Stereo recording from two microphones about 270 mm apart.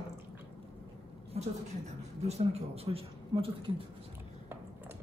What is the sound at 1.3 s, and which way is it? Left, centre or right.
A man's voice, right.